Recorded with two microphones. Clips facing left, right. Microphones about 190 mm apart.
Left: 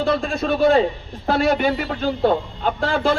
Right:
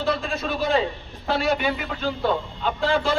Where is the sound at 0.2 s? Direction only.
50° left (ahead or behind).